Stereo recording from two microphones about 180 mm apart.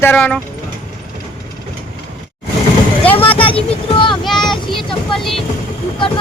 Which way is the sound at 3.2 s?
30° left (ahead or behind).